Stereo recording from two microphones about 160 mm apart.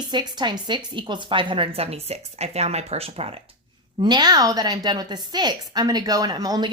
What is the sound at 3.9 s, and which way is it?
A woman's voice, 25° right (ahead or behind).